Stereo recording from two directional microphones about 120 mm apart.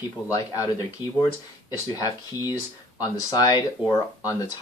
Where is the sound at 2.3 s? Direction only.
30° left (ahead or behind).